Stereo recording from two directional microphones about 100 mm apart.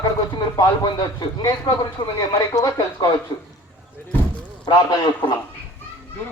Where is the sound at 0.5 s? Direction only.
40° left (ahead or behind).